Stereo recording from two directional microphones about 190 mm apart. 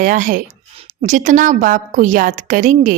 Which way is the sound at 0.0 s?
45° right (ahead or behind).